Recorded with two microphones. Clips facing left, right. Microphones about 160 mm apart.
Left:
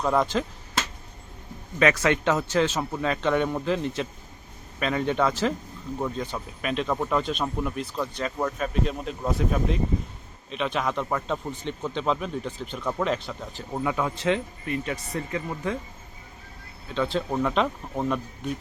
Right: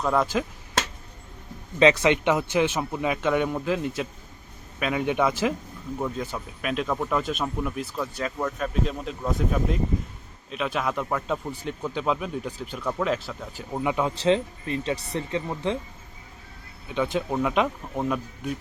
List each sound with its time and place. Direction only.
0.0 s speech: centre (ahead or behind)
1.8 s speech: 20° right (ahead or behind)
12.8 s speech: 5° left (ahead or behind); by 14.1 s 20° right (ahead or behind)
14.2 s speech: 30° right (ahead or behind)
16.9 s speech: 15° right (ahead or behind)